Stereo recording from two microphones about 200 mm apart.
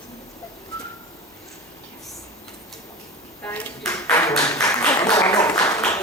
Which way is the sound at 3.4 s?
10° left (ahead or behind).